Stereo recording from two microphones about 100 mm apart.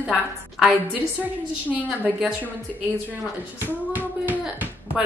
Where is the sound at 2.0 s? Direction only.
15° right (ahead or behind).